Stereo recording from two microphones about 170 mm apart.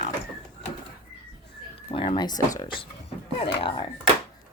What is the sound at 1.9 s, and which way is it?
Speech, 30° left (ahead or behind).